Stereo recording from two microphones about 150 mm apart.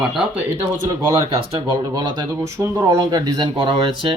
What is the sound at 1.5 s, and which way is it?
Speech, 30° right (ahead or behind).